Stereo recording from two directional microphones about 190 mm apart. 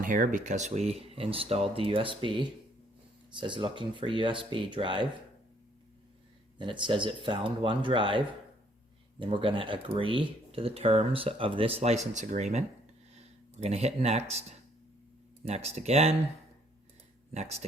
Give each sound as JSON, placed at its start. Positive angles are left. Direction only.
{"t": 0.0, "sound": "speech", "side_deg": -45}
{"t": 6.6, "sound": "speech", "side_deg": -25}
{"t": 17.3, "sound": "speech", "side_deg": -35}